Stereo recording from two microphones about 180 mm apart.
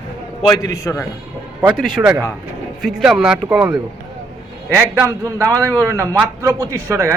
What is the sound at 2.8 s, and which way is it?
Speech, centre (ahead or behind).